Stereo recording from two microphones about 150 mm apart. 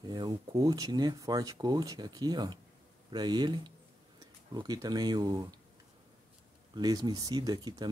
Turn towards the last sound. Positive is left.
turn(degrees=-25)  # may be behind; listen again after turning